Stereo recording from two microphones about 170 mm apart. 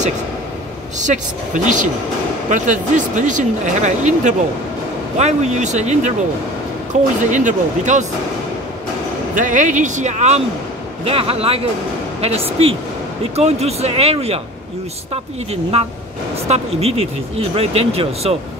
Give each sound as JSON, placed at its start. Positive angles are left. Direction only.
{"t": 0.9, "sound": "speech", "side_deg": -45}
{"t": 9.3, "sound": "speech", "side_deg": -50}
{"t": 15.7, "sound": "speech", "side_deg": -35}